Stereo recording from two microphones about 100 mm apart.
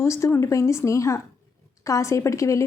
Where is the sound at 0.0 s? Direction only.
25° left (ahead or behind).